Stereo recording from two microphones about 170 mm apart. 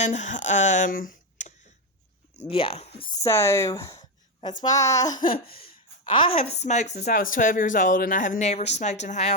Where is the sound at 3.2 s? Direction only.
15° left (ahead or behind).